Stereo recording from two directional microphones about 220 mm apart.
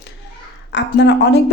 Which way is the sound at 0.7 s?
50° left (ahead or behind).